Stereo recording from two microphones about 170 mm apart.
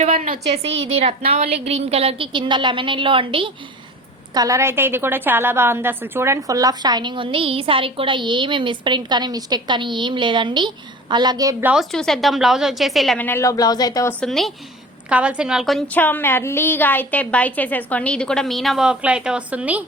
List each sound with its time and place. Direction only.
0.0 s a woman's voice: 40° right (ahead or behind)
4.4 s a woman's voice: 20° right (ahead or behind)
11.6 s a woman's voice: 5° right (ahead or behind)
13.2 s speech: 15° left (ahead or behind)
14.1 s a woman's voice: 5° left (ahead or behind)